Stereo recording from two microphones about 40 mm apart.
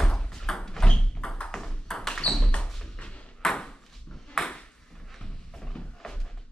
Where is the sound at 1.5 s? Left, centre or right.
Centre.